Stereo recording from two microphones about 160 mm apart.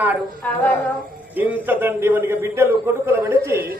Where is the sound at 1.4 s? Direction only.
10° right (ahead or behind).